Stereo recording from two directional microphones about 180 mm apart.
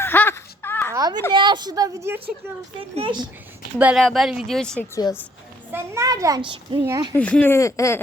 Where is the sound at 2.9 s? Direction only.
30° right (ahead or behind).